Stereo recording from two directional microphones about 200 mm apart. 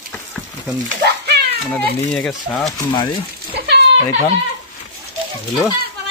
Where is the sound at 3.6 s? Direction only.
55° right (ahead or behind).